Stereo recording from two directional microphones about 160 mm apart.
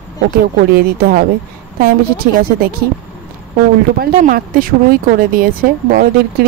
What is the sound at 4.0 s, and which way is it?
Speech, 65° right (ahead or behind).